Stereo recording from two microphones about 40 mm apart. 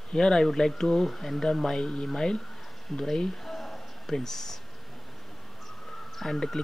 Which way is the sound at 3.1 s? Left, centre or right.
Centre.